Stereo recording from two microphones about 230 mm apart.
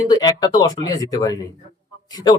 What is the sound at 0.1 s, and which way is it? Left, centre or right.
Speech, centre.